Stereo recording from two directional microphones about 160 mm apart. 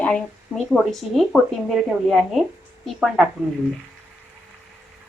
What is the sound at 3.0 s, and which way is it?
Speech, 5° right (ahead or behind).